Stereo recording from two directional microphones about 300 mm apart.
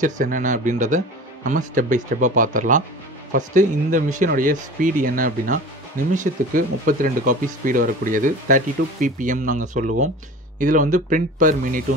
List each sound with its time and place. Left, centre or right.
0.0 s speech: right